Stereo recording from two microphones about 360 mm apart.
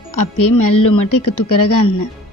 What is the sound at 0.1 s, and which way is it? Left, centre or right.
Speech, left.